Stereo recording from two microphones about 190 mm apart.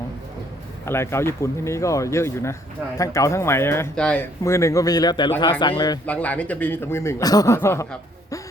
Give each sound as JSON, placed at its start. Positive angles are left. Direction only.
{"t": 0.9, "sound": "speech", "side_deg": 15}
{"t": 6.1, "sound": "speech", "side_deg": 5}